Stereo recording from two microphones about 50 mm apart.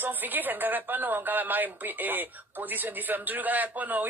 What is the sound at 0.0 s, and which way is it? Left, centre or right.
A woman's voice, right.